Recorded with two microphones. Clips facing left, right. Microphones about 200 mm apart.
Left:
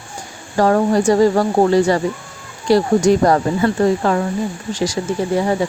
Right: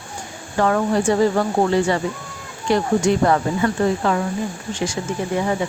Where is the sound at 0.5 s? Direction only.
35° left (ahead or behind).